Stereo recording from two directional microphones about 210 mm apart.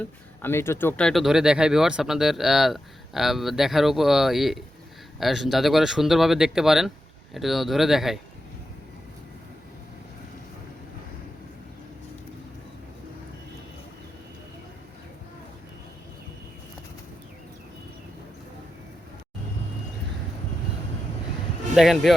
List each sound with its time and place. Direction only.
0.0 s speech: 10° left (ahead or behind)
21.8 s speech: centre (ahead or behind)